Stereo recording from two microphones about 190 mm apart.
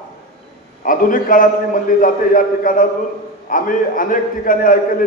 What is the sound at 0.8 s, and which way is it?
A man's voice, 45° left (ahead or behind).